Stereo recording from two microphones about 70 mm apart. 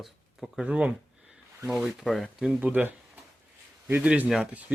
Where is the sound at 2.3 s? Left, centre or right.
Centre.